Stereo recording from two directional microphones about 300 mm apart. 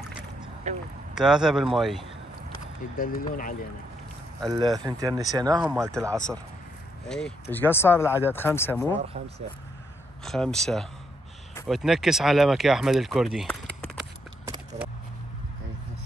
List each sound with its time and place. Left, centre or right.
0.7 s speech: right
1.1 s speech: centre
3.0 s speech: left
4.7 s speech: centre
7.1 s speech: centre
10.2 s speech: centre
14.4 s vehicle: centre